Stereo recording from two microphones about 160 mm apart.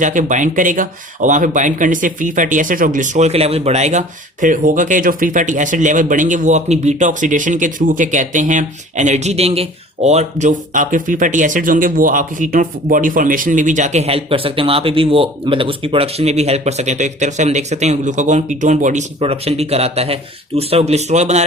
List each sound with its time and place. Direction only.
0.0 s speech: 50° right (ahead or behind)
19.2 s speech: 40° right (ahead or behind)